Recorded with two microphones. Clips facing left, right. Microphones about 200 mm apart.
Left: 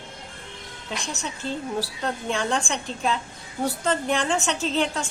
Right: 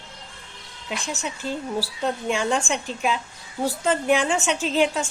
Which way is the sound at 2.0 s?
5° right (ahead or behind).